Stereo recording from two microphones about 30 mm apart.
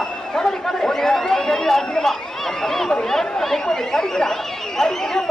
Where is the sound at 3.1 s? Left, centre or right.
Centre.